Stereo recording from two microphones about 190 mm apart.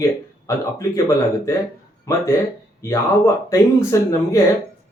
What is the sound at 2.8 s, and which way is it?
Speech, 15° left (ahead or behind).